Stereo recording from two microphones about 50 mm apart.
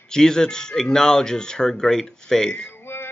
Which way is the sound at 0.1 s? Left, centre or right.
Centre.